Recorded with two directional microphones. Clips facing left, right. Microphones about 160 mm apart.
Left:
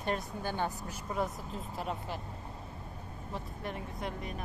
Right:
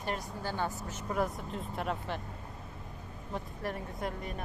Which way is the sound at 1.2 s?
Centre (ahead or behind).